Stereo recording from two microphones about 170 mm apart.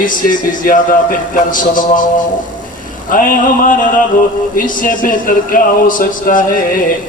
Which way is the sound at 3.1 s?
55° left (ahead or behind).